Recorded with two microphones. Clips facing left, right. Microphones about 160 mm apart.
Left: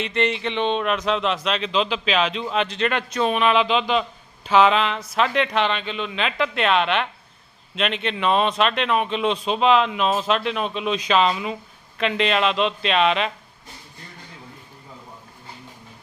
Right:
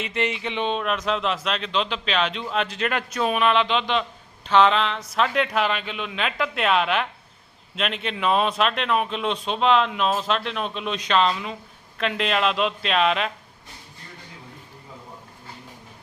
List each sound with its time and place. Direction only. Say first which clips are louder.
0.0 s speech: left 3 dB; 5° right (ahead or behind)